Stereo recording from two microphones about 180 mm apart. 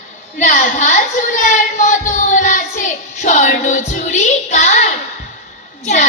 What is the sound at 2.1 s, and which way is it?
Child singing, 45° left (ahead or behind).